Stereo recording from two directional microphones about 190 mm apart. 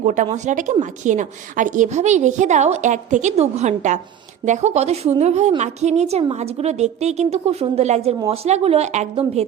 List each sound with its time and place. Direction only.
0.0 s a woman's voice: 40° right (ahead or behind)